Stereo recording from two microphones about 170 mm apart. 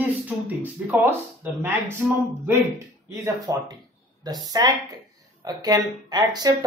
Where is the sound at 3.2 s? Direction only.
25° right (ahead or behind).